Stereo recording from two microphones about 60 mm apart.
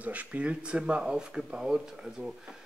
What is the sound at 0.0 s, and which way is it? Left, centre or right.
Speech, right.